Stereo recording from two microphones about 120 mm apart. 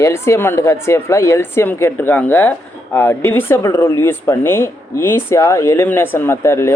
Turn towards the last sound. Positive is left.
turn(degrees=20)  # may be behind; listen again after turning